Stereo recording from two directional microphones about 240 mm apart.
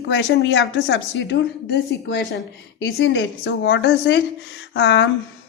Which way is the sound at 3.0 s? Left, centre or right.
Left.